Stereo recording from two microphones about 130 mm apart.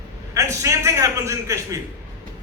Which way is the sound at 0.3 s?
25° right (ahead or behind).